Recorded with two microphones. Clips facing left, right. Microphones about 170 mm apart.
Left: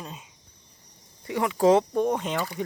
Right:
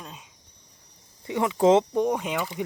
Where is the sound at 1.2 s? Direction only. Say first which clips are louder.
Right 1 dB; 20° right (ahead or behind).